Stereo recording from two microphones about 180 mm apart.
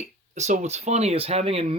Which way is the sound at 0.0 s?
40° right (ahead or behind).